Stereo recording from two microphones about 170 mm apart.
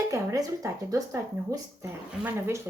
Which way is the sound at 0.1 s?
20° right (ahead or behind).